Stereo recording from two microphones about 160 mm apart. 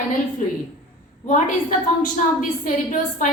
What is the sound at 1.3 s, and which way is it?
A woman's voice, 55° left (ahead or behind).